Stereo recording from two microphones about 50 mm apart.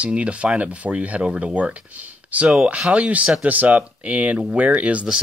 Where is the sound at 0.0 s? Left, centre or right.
Right.